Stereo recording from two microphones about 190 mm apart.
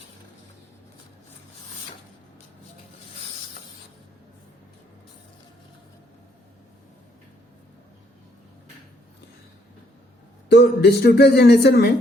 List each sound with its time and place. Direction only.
10.5 s speech: 60° left (ahead or behind)